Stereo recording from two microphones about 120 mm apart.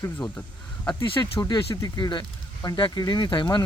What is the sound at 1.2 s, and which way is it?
Speech, 30° left (ahead or behind).